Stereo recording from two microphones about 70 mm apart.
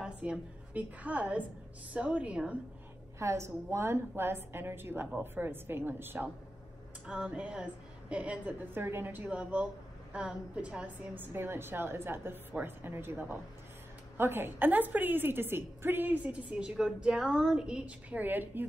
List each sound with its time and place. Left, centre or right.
0.2 s a woman's voice: right
3.2 s a woman's voice: right
7.2 s a woman's voice: centre
8.7 s a woman's voice: right; by 11.1 s centre
11.1 s a woman's voice: right